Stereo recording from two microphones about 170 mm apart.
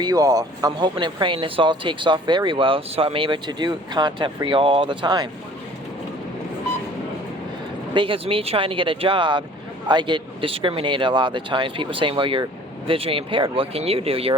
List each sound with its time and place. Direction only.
0.0 s speech: 20° right (ahead or behind)
7.9 s speech: 30° right (ahead or behind)